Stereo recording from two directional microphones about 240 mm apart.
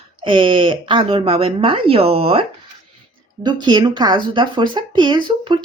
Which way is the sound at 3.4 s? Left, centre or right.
Centre.